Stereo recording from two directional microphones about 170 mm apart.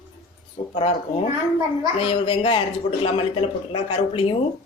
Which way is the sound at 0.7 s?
35° left (ahead or behind).